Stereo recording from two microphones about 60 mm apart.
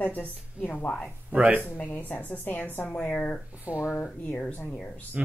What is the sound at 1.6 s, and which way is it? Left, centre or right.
A woman's voice, left.